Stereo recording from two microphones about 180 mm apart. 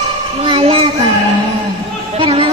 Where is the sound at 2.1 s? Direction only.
30° right (ahead or behind).